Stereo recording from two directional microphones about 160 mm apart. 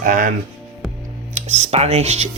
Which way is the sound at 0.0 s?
60° right (ahead or behind).